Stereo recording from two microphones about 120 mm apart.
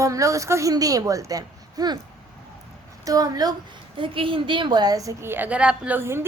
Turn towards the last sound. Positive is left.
turn(degrees=-20)  # may be behind; listen again after turning